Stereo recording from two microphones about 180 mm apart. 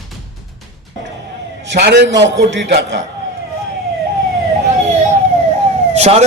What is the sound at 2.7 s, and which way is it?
Speech, 75° right (ahead or behind).